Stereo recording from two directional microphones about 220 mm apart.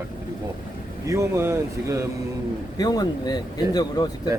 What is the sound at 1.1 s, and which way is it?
Speech, 15° right (ahead or behind).